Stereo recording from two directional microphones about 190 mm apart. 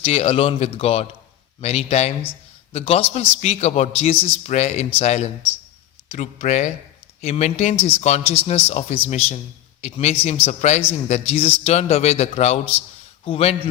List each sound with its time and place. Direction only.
0.0 s speech: 30° left (ahead or behind)